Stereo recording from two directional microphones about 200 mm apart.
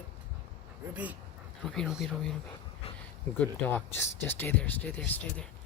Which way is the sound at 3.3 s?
10° left (ahead or behind).